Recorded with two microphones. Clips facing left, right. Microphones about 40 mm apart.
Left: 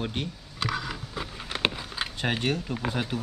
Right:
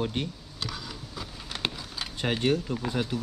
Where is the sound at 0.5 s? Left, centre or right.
Left.